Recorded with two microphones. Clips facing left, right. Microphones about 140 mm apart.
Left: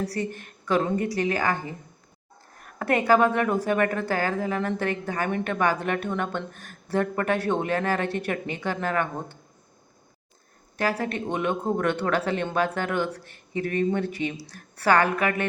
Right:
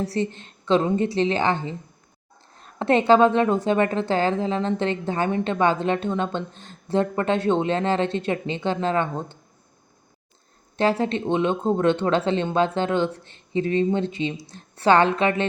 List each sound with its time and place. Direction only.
0.0 s a woman's voice: 25° right (ahead or behind)
10.8 s a woman's voice: 25° right (ahead or behind)